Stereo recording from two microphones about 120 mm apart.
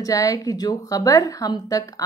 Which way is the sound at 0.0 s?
30° left (ahead or behind).